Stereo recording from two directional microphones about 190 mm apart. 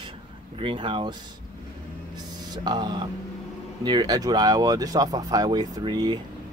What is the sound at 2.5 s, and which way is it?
Speech, 20° right (ahead or behind).